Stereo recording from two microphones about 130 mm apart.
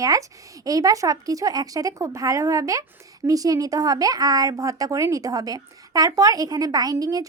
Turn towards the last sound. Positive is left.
turn(degrees=-25)  # may be behind; listen again after turning